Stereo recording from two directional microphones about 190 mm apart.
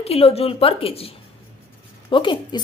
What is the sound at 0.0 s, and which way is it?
A woman's voice, 30° left (ahead or behind).